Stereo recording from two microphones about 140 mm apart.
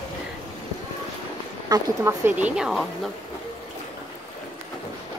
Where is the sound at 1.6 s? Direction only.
25° right (ahead or behind).